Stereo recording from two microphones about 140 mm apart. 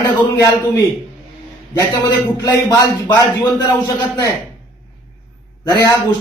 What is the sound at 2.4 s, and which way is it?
A man's voice, 25° left (ahead or behind).